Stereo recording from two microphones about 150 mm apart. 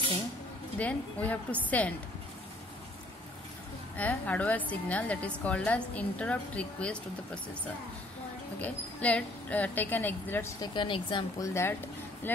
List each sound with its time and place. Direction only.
0.7 s a woman's voice: 10° left (ahead or behind)
3.9 s a woman's voice: 10° left (ahead or behind)
8.5 s a woman's voice: 10° left (ahead or behind)
10.6 s speech: 30° left (ahead or behind)
11.4 s a woman's voice: 20° left (ahead or behind)